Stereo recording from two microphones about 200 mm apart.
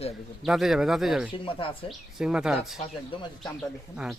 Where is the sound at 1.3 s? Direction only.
25° left (ahead or behind).